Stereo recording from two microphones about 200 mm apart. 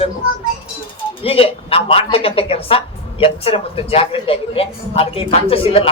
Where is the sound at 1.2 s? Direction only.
30° left (ahead or behind).